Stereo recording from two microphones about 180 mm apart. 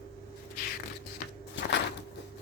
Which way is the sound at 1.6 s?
75° left (ahead or behind).